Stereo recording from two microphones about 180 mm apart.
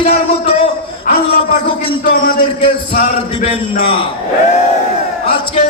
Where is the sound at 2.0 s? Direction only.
55° left (ahead or behind).